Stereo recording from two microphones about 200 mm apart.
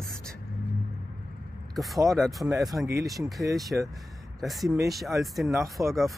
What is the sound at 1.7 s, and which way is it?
Speech, centre (ahead or behind).